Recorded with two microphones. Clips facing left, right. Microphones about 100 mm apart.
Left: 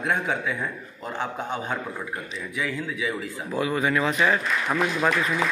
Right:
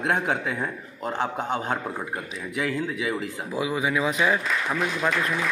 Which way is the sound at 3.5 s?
10° right (ahead or behind).